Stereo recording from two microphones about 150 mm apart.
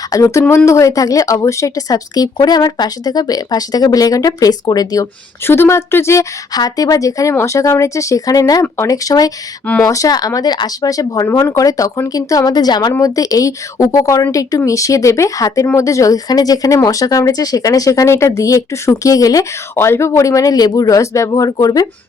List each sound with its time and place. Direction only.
0.1 s a woman's voice: 20° left (ahead or behind)